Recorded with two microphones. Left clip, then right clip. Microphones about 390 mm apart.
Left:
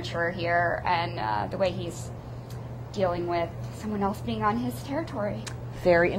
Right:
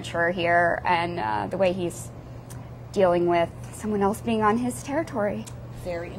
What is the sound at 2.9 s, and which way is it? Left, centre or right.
A woman's voice, right.